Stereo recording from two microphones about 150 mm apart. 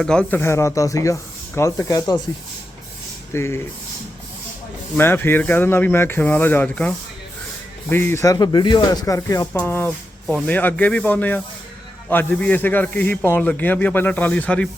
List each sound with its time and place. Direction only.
0.0 s speech: 5° left (ahead or behind); by 2.2 s 25° left (ahead or behind)
3.3 s speech: 15° left (ahead or behind)
4.9 s speech: 15° left (ahead or behind)
9.5 s speech: 10° left (ahead or behind)